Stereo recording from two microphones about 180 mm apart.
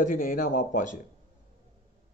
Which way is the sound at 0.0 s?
50° left (ahead or behind).